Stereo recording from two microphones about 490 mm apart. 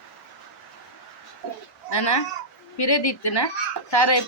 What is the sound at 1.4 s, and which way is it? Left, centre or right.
A woman's voice, left.